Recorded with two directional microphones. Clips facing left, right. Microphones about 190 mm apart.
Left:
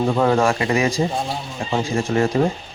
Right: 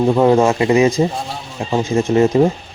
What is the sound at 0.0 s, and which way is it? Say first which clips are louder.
Speech: right 5 dB; 20° right (ahead or behind).